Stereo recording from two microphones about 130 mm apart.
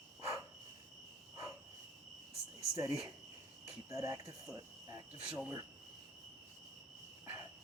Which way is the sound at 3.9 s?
25° right (ahead or behind).